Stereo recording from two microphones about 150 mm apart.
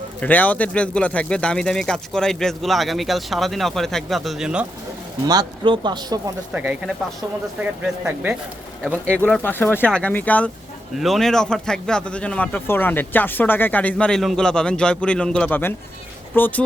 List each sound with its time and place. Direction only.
0.2 s speech: 10° left (ahead or behind); by 4.6 s 5° right (ahead or behind)
5.2 s speech: 25° right (ahead or behind)
6.5 s speech: 10° right (ahead or behind)
8.8 s speech: 5° left (ahead or behind)